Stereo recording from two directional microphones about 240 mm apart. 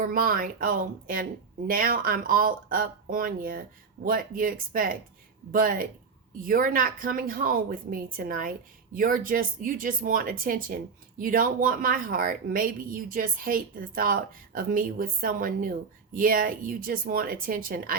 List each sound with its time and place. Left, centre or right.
0.0 s a woman's voice: right